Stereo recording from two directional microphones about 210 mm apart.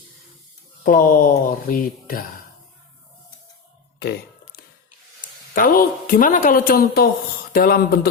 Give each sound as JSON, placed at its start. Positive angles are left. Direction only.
{"t": 0.9, "sound": "a woman's voice", "side_deg": 40}
{"t": 5.5, "sound": "a woman's voice", "side_deg": 40}